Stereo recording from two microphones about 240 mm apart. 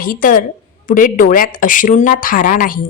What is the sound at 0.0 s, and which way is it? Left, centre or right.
Speech, left.